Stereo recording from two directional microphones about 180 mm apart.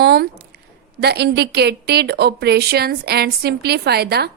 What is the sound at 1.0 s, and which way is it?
A woman's voice, 65° right (ahead or behind).